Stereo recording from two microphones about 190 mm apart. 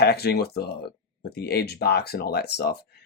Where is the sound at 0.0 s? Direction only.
60° left (ahead or behind).